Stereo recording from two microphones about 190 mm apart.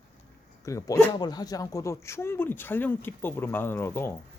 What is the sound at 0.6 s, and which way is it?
Speech, 15° left (ahead or behind).